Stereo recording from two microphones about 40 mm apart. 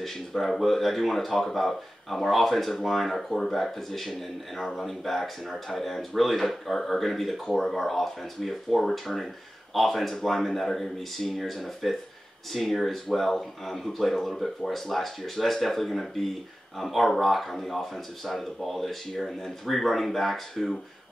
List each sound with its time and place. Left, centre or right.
0.0 s speech: centre